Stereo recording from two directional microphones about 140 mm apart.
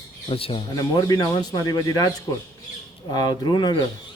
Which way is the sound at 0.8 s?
25° left (ahead or behind).